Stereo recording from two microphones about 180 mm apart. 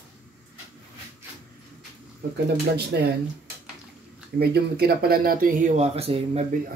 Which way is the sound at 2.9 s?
70° right (ahead or behind).